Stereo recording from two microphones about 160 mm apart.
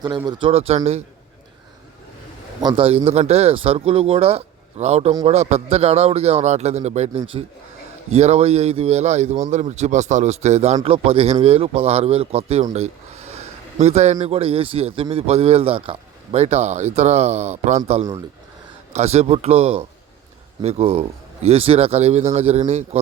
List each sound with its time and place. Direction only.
0.3 s speech: 30° right (ahead or behind)
2.6 s a man's voice: 30° right (ahead or behind)
12.7 s a sound: 40° right (ahead or behind)
13.7 s a man's voice: 45° right (ahead or behind)